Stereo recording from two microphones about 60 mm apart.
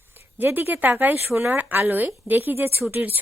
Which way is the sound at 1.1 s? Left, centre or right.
Right.